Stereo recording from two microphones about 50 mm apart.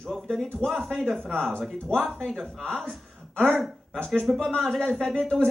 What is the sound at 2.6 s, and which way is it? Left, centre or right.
Speech, centre.